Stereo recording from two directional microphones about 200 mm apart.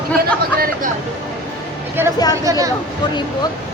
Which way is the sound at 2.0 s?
10° right (ahead or behind).